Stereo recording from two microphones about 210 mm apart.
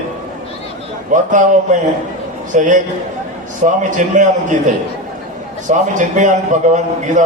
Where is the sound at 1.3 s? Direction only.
35° right (ahead or behind).